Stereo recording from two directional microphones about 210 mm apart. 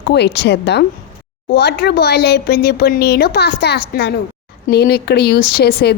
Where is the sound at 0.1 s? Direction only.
55° left (ahead or behind).